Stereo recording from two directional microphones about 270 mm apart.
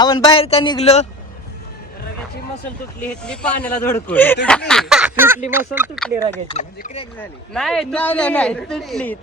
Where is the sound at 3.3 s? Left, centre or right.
Centre.